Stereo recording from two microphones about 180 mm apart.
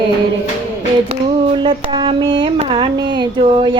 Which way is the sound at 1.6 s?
25° right (ahead or behind).